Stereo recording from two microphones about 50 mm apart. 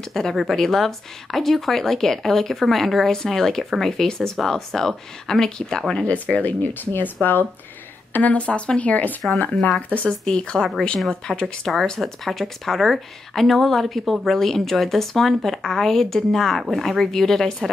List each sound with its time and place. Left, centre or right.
0.1 s speech: centre
6.0 s speech: left
9.9 s speech: centre